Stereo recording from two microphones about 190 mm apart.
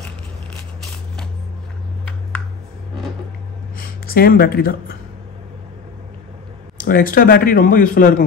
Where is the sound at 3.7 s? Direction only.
50° left (ahead or behind).